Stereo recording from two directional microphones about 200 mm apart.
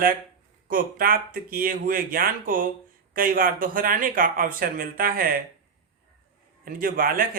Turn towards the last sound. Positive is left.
turn(degrees=-45)  # may be behind; listen again after turning